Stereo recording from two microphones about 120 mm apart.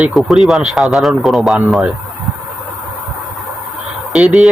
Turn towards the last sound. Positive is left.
turn(degrees=-5)  # may be behind; listen again after turning